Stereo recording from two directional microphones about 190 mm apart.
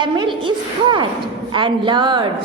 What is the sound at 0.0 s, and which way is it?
A woman's voice, 25° right (ahead or behind).